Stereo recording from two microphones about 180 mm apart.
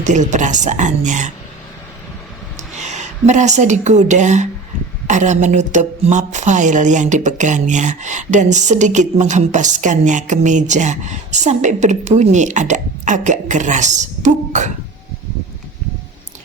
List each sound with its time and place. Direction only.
0.0 s a woman's voice: 40° right (ahead or behind)
2.7 s a woman's voice: 40° right (ahead or behind)